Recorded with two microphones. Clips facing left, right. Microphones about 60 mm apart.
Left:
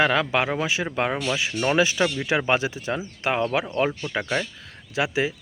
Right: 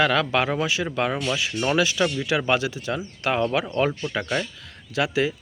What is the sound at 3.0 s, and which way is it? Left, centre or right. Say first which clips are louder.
Speech: right 1 dB; centre.